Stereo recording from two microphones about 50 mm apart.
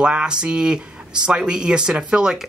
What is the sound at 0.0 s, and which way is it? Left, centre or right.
Speech, centre.